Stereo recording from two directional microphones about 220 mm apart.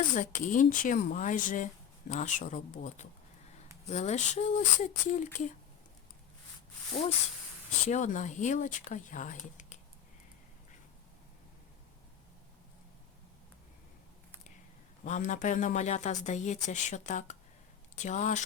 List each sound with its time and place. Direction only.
0.1 s speech: 35° left (ahead or behind)
7.9 s speech: 35° left (ahead or behind)
15.0 s speech: 35° left (ahead or behind)